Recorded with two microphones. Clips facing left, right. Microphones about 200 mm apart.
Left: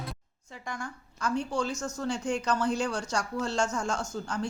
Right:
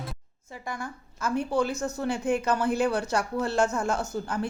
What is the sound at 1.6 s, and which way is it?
Speech, 60° right (ahead or behind).